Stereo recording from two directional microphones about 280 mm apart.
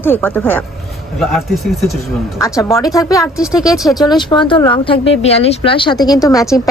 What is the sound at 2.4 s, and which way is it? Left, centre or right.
A woman's voice, centre.